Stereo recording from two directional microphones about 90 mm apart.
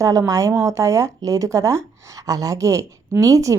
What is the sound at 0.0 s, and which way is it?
A woman's voice, 40° right (ahead or behind).